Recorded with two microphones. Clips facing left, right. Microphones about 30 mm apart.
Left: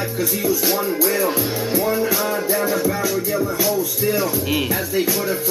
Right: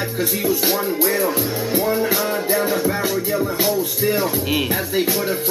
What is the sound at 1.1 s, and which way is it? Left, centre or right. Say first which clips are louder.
Speech: even; centre.